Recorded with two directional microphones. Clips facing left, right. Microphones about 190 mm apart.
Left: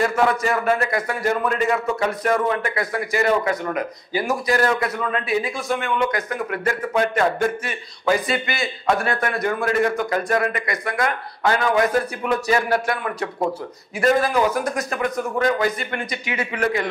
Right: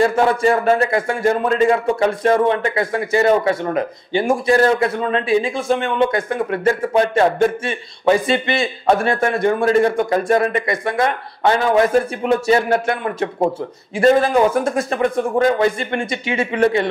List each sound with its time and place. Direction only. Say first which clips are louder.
0.0 s speech: right 5 dB; 30° right (ahead or behind)